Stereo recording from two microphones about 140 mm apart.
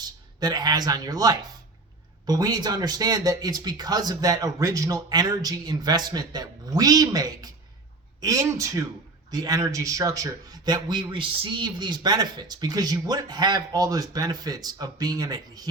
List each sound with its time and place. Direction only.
0.0 s speech: 30° right (ahead or behind)